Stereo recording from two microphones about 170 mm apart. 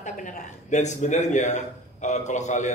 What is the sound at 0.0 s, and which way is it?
A man's voice, 45° left (ahead or behind).